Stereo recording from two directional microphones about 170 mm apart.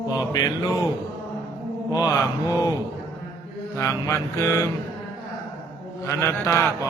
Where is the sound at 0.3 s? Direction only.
20° left (ahead or behind).